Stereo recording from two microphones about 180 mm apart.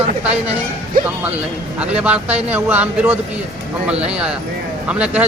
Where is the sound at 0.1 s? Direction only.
35° right (ahead or behind).